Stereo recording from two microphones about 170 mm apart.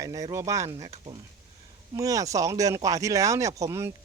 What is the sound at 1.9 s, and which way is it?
Speech, 20° right (ahead or behind).